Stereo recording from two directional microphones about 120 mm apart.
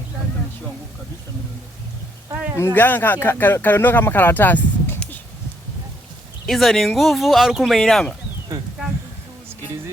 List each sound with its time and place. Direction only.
2.3 s speech: 15° right (ahead or behind)
2.6 s speech: 20° left (ahead or behind)
6.4 s speech: centre (ahead or behind)